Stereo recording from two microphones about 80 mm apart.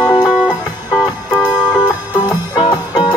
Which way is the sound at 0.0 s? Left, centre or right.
Left.